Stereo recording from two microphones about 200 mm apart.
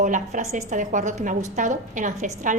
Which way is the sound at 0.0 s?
40° right (ahead or behind).